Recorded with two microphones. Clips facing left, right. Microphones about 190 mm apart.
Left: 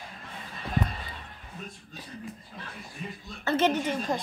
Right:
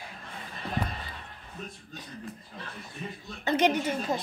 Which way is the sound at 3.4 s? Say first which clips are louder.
Even; 15° right (ahead or behind).